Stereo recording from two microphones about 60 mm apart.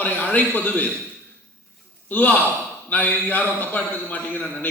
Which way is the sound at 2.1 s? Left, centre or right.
Left.